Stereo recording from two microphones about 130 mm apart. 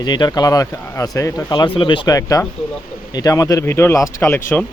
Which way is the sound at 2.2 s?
25° left (ahead or behind).